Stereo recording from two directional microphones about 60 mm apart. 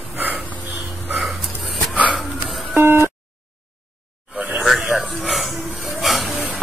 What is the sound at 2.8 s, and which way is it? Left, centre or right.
Busy signal, right.